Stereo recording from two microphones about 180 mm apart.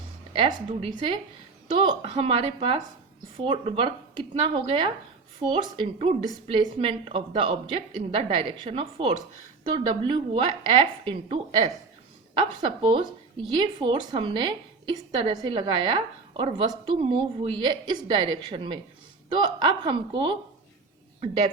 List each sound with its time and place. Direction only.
0.3 s a woman's voice: 30° right (ahead or behind)